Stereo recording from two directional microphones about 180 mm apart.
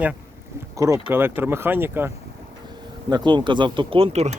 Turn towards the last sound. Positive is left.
turn(degrees=-35)  # may be behind; listen again after turning